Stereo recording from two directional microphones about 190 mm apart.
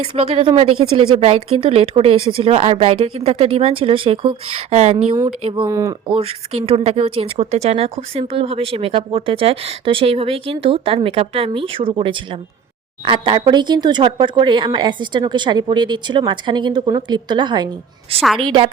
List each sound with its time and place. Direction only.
0.0 s speech: 30° right (ahead or behind)
5.6 s speech: 15° right (ahead or behind)
6.1 s speech: 30° right (ahead or behind)